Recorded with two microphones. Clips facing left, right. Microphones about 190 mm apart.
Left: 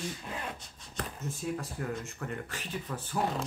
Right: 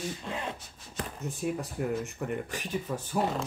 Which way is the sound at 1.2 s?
15° right (ahead or behind).